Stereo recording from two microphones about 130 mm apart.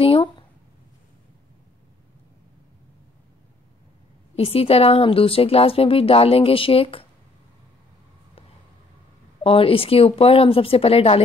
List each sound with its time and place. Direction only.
0.0 s a sound: 45° left (ahead or behind)
4.4 s a woman's voice: 50° left (ahead or behind)
9.4 s a woman's voice: 45° left (ahead or behind)